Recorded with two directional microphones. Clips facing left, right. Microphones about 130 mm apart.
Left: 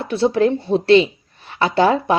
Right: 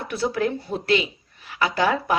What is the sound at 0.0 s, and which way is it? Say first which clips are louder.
A woman's voice: left 8 dB; 25° left (ahead or behind).